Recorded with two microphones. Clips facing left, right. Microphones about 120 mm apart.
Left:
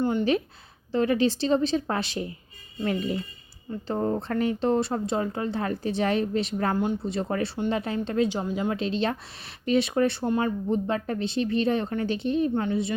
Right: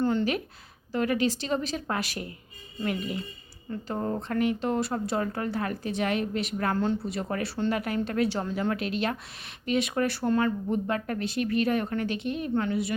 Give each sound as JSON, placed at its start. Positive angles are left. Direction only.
{"t": 0.0, "sound": "a sound", "side_deg": 15}
{"t": 0.9, "sound": "speech", "side_deg": 30}
{"t": 3.7, "sound": "speech", "side_deg": 20}
{"t": 4.3, "sound": "speech", "side_deg": 30}
{"t": 8.7, "sound": "speech", "side_deg": 25}